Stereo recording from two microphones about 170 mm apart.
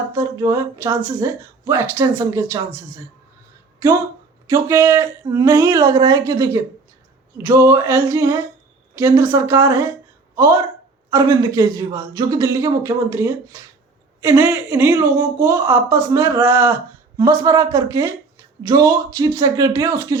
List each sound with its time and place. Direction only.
0.1 s speech: 15° right (ahead or behind)
4.4 s speech: 15° right (ahead or behind)